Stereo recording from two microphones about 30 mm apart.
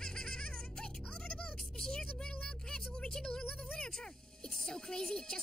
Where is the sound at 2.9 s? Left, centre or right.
Left.